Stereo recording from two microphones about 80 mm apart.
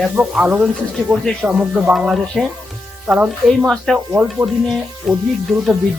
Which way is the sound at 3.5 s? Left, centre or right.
Centre.